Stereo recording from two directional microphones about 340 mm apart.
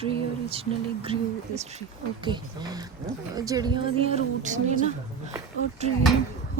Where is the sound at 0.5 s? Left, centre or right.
Centre.